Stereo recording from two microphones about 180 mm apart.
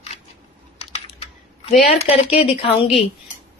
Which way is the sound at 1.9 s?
35° left (ahead or behind).